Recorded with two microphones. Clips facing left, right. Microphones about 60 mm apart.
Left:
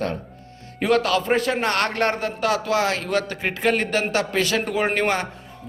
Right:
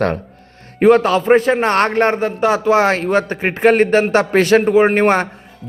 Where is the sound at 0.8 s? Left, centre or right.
Right.